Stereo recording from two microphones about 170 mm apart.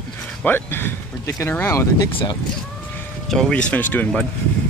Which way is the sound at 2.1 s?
30° left (ahead or behind).